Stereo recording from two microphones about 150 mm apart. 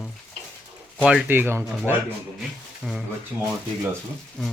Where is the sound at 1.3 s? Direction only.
15° right (ahead or behind).